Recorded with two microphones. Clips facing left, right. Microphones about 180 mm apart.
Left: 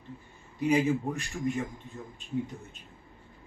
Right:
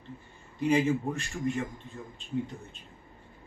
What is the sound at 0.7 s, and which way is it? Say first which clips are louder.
Speech: even; 15° left (ahead or behind).